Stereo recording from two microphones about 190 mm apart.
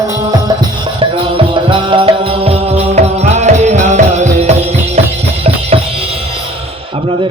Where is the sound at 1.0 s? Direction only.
25° right (ahead or behind).